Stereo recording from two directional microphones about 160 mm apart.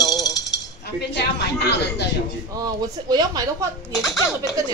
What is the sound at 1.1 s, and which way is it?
Speech, 90° left.